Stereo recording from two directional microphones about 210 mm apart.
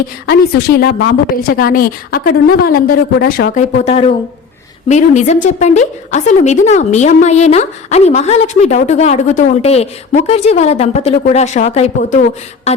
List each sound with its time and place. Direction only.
0.8 s a woman's voice: 50° left (ahead or behind); by 12.2 s 30° left (ahead or behind)
12.7 s beatboxing: 30° left (ahead or behind)